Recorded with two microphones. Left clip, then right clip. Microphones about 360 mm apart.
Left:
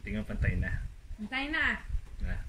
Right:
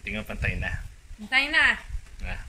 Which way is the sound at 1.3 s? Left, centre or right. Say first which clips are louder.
Right 10 dB; centre.